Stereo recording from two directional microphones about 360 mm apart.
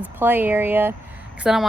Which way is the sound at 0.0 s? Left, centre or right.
Centre.